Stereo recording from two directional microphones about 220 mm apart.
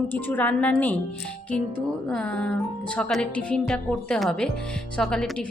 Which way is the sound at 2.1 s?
5° left (ahead or behind).